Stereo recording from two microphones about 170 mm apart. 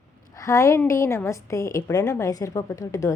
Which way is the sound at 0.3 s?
20° left (ahead or behind).